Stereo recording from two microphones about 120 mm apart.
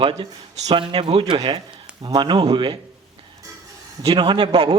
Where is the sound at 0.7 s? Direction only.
40° right (ahead or behind).